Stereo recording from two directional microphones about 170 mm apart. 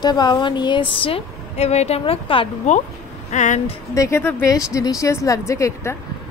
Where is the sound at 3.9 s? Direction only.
15° left (ahead or behind).